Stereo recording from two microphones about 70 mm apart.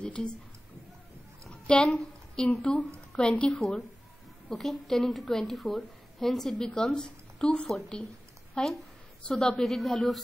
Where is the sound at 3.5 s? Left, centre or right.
Centre.